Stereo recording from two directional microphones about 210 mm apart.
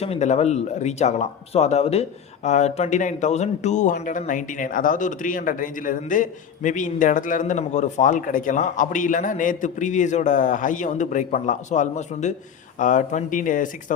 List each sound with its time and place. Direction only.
0.0 s a man's voice: 30° left (ahead or behind)